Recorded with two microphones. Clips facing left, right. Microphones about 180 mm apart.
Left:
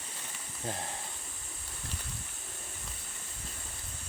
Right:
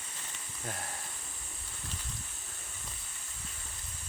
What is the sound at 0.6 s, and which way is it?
Speech, 25° left (ahead or behind).